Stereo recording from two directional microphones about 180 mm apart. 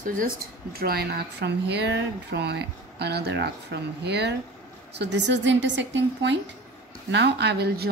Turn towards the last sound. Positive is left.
turn(degrees=-65)  # may be behind; listen again after turning